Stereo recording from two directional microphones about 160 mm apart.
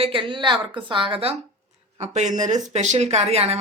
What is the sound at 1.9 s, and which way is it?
Speech, 45° right (ahead or behind).